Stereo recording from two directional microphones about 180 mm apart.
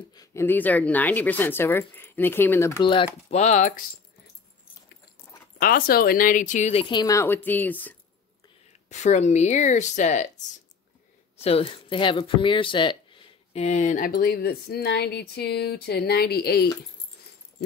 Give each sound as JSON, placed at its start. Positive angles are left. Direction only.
{"t": 0.1, "sound": "speech", "side_deg": 20}
{"t": 2.8, "sound": "speech", "side_deg": 30}
{"t": 5.6, "sound": "speech", "side_deg": 55}
{"t": 8.8, "sound": "speech", "side_deg": 40}
{"t": 11.3, "sound": "speech", "side_deg": 35}